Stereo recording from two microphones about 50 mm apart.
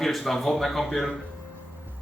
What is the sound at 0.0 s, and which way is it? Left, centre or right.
Speech, centre.